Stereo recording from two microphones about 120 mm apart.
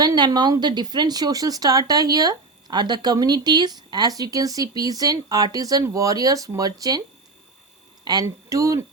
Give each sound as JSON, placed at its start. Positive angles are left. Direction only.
{"t": 0.0, "sound": "speech", "side_deg": -35}
{"t": 8.0, "sound": "speech", "side_deg": -35}